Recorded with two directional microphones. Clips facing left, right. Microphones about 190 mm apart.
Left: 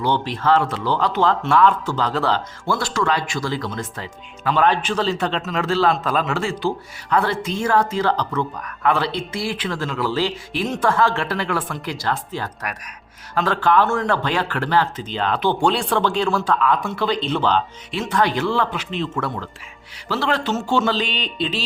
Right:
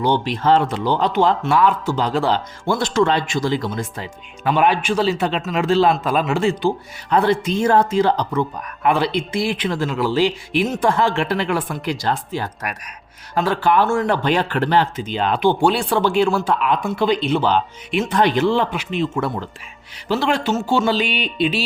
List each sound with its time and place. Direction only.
0.0 s speech: 15° right (ahead or behind)